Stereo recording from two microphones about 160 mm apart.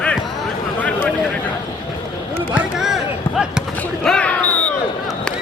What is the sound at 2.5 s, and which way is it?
Basketball bounce, 5° right (ahead or behind).